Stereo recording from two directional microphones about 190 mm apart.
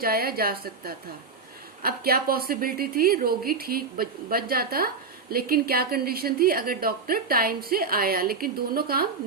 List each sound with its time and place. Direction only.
0.0 s a woman's voice: 50° right (ahead or behind)